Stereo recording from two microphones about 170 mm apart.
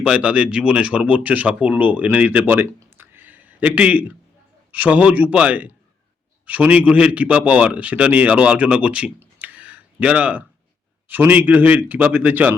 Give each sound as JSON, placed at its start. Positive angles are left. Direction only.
{"t": 0.0, "sound": "a man's voice", "side_deg": -5}